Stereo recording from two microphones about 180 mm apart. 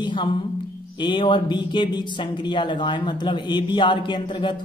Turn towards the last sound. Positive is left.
turn(degrees=25)  # may be behind; listen again after turning